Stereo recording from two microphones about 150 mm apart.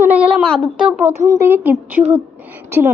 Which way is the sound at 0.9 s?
10° right (ahead or behind).